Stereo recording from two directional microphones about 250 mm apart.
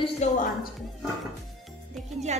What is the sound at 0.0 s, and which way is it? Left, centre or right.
Music, left.